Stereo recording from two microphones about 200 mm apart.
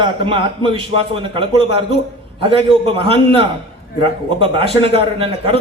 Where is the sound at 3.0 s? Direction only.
25° right (ahead or behind).